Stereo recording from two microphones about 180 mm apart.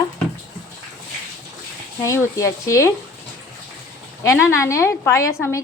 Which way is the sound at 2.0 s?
15° left (ahead or behind).